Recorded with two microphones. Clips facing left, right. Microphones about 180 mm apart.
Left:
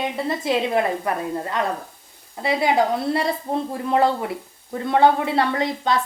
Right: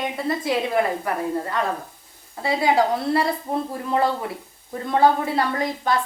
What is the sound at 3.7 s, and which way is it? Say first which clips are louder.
A woman's voice: left 4 dB; 20° left (ahead or behind).